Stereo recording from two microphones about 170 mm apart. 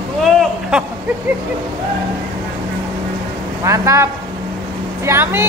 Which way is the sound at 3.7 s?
15° right (ahead or behind).